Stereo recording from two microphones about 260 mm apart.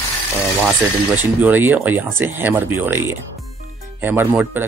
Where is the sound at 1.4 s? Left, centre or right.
Centre.